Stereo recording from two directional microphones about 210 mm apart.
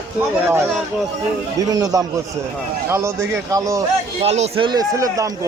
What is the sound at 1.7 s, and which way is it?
A man's voice, 15° right (ahead or behind).